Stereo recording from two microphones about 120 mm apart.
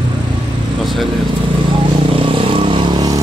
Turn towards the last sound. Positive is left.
turn(degrees=-40)  # may be behind; listen again after turning